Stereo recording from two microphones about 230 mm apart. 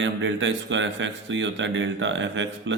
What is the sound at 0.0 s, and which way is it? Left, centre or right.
Speech, right.